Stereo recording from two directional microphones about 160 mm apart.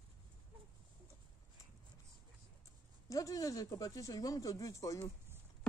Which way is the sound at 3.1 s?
20° left (ahead or behind).